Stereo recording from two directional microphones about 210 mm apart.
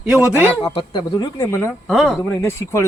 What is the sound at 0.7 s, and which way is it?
Speech, 25° left (ahead or behind).